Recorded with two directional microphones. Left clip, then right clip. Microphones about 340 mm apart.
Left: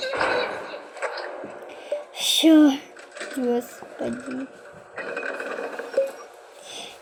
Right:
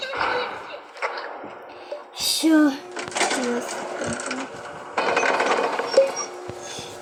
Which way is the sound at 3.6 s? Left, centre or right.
Right.